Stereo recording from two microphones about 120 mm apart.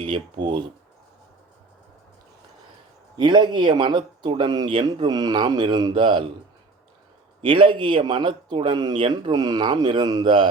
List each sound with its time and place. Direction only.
0.0 s speech: 40° right (ahead or behind)
3.2 s speech: 40° right (ahead or behind)
7.4 s speech: 45° right (ahead or behind)